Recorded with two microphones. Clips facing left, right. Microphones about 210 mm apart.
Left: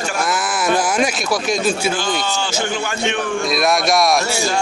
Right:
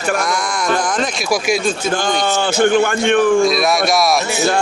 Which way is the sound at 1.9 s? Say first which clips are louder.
Right 4 dB; 50° right (ahead or behind).